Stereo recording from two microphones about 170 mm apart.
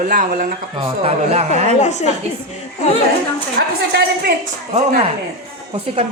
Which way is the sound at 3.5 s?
60° right (ahead or behind).